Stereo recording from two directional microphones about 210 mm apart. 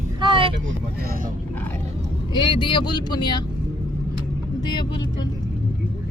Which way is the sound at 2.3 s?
25° left (ahead or behind).